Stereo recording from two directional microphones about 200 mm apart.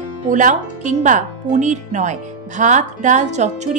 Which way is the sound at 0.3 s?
40° right (ahead or behind).